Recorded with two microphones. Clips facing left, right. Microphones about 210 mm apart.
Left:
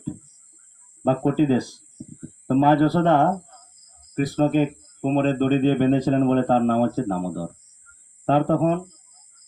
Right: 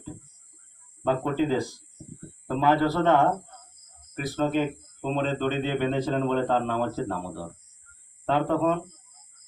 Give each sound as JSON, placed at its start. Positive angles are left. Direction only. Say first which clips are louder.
{"t": 1.0, "sound": "speech", "louder": "left 6 dB", "side_deg": 40}
{"t": 4.4, "sound": "speech", "louder": "left 5 dB", "side_deg": 45}